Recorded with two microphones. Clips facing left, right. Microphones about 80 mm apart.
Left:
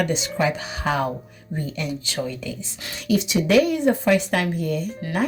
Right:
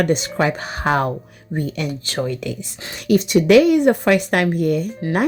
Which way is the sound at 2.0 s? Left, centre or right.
Right.